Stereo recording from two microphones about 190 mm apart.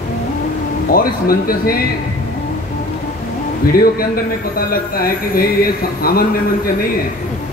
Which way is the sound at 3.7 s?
50° left (ahead or behind).